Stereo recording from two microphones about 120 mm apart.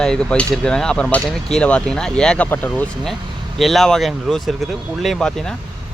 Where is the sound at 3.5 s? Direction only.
Centre (ahead or behind).